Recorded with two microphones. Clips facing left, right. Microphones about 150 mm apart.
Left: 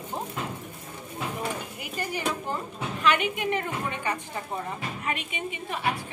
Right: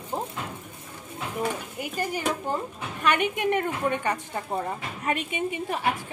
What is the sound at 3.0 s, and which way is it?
Speech, 55° right (ahead or behind).